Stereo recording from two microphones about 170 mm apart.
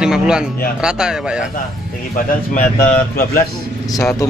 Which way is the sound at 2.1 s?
55° left (ahead or behind).